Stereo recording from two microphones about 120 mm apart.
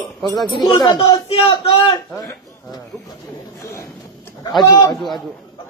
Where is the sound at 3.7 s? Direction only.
20° left (ahead or behind).